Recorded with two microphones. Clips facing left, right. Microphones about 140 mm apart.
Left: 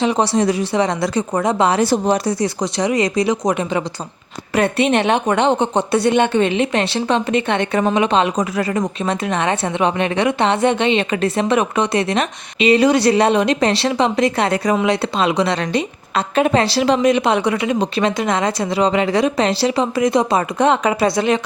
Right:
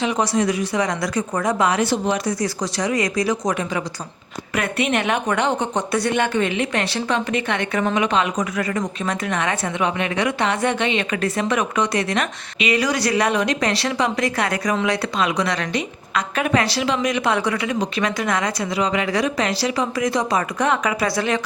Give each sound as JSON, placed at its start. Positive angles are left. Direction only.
{"t": 0.0, "sound": "speech", "side_deg": 30}
{"t": 2.4, "sound": "a woman's voice", "side_deg": 25}